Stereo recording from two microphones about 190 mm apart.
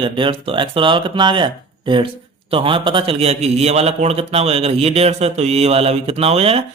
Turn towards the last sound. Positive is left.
turn(degrees=-30)  # may be behind; listen again after turning